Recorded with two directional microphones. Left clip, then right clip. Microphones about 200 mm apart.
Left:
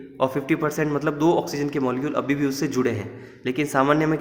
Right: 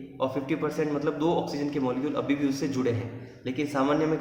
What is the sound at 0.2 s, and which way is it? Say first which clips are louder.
A man's voice: left 6 dB; 50° left (ahead or behind).